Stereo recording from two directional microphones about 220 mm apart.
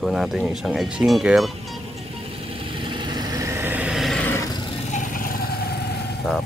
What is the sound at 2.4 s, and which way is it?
Vehicle, 25° right (ahead or behind).